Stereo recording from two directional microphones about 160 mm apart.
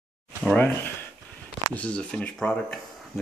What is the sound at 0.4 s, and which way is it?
Speech, 5° left (ahead or behind).